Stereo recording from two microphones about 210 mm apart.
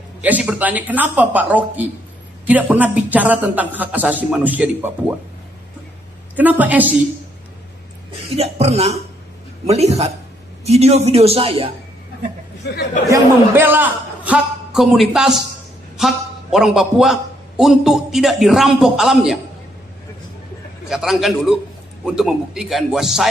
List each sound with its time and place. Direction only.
0.2 s a man's voice: 5° right (ahead or behind)
6.3 s a man's voice: 10° right (ahead or behind)
8.4 s a man's voice: 30° right (ahead or behind)
12.6 s speech: 50° left (ahead or behind)
13.1 s a man's voice: 10° right (ahead or behind)
20.9 s a man's voice: centre (ahead or behind)